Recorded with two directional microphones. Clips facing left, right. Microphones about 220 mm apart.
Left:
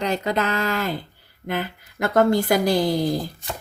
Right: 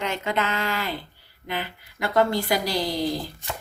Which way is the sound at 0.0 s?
40° left (ahead or behind).